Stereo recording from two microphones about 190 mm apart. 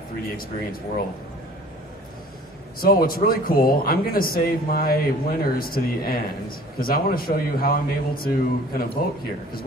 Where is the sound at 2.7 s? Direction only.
50° left (ahead or behind).